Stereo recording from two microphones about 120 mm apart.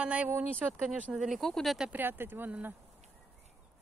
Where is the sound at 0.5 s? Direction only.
5° left (ahead or behind).